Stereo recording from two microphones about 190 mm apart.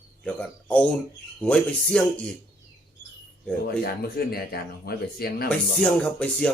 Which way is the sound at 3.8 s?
55° left (ahead or behind).